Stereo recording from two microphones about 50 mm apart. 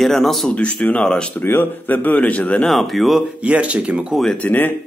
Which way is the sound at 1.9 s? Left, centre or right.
Left.